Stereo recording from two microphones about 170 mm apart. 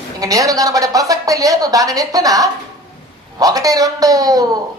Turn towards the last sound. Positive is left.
turn(degrees=-20)  # may be behind; listen again after turning